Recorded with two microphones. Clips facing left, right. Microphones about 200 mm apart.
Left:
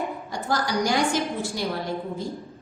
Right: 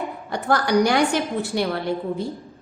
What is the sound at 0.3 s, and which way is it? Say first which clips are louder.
A woman's voice: right 8 dB; 60° right (ahead or behind).